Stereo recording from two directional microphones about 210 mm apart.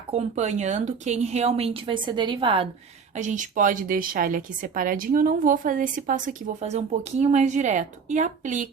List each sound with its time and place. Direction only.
0.1 s speech: 30° right (ahead or behind)
3.2 s a woman's voice: 35° right (ahead or behind)